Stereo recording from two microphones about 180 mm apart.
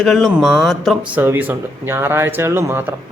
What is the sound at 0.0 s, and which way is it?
Speech, centre (ahead or behind).